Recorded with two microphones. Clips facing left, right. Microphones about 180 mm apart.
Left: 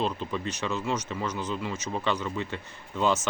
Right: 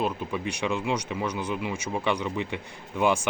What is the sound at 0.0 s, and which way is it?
Speech, 10° right (ahead or behind).